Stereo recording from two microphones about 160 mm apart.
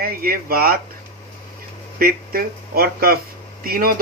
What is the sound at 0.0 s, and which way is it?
Speech, 70° right (ahead or behind).